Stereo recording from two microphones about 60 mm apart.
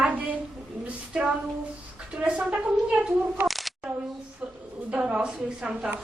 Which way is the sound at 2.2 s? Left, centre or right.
Centre.